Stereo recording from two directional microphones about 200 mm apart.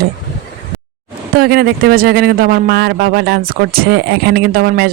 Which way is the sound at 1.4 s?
50° right (ahead or behind).